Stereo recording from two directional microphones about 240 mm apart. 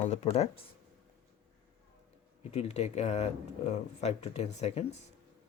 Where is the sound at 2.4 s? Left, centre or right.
Left.